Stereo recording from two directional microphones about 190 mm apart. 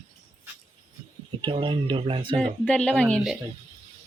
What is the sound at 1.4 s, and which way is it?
Speech, 25° right (ahead or behind).